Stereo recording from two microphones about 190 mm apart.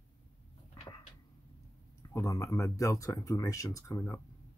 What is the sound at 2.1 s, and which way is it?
Speech, 15° left (ahead or behind).